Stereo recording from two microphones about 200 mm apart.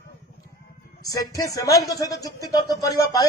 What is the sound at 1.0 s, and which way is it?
A man's voice, 15° left (ahead or behind).